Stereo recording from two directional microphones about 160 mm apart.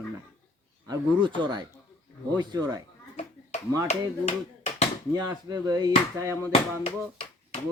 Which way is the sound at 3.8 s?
40° left (ahead or behind).